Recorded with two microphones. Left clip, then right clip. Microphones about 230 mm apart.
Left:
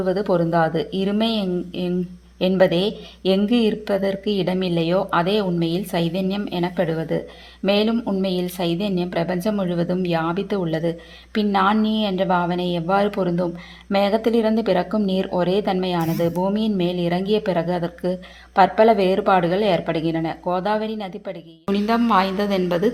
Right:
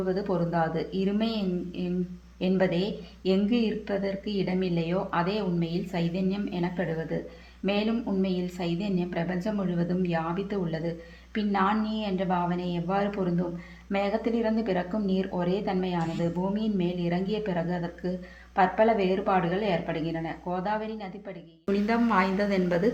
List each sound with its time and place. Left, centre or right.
0.0 s a woman's voice: left
21.7 s speech: left